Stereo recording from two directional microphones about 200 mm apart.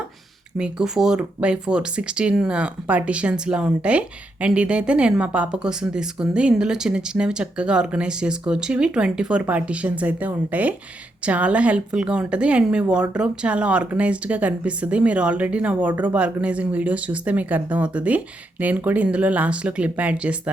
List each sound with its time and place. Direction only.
0.5 s a woman's voice: 5° right (ahead or behind)